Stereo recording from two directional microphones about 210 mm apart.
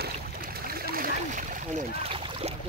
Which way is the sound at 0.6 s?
45° right (ahead or behind).